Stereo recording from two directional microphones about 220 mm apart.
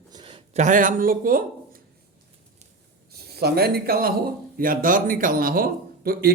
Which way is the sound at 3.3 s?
45° right (ahead or behind).